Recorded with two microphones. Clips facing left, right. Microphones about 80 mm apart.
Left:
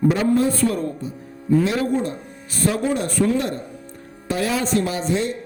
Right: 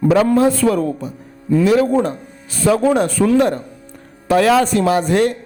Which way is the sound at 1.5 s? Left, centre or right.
Right.